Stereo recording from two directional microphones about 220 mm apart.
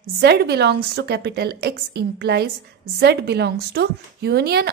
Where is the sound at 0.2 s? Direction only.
45° right (ahead or behind).